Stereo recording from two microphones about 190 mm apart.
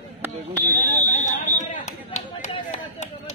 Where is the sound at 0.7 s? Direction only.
45° left (ahead or behind).